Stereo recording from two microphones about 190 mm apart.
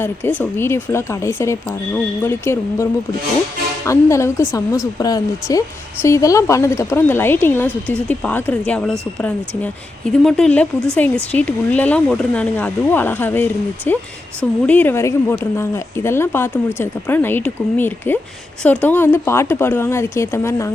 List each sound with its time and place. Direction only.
0.0 s a woman's voice: 10° left (ahead or behind)
3.8 s a woman's voice: 15° left (ahead or behind)